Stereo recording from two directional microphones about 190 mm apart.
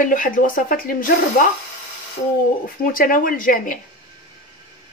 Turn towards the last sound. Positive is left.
turn(degrees=45)  # may be behind; listen again after turning